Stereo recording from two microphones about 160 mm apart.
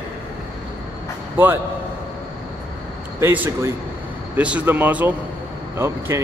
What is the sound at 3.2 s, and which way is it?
Speech, 15° right (ahead or behind).